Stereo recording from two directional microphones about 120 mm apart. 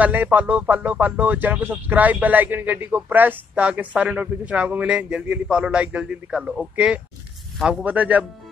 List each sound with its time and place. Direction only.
0.0 s speech: 15° right (ahead or behind)
7.8 s speech: 10° right (ahead or behind)